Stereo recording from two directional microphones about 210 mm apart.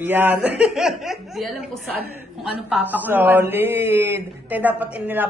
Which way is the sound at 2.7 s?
10° right (ahead or behind).